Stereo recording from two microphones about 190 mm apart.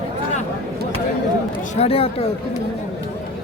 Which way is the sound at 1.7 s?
30° left (ahead or behind).